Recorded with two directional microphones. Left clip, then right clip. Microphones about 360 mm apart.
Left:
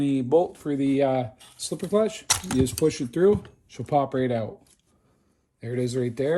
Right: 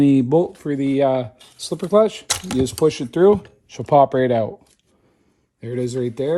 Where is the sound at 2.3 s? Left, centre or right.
Centre.